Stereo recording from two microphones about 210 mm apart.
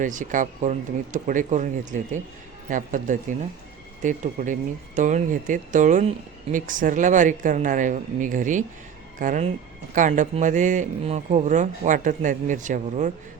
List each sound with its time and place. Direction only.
0.0 s speech: 35° right (ahead or behind)